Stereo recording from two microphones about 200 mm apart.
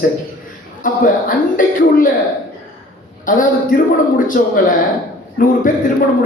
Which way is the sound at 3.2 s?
40° left (ahead or behind).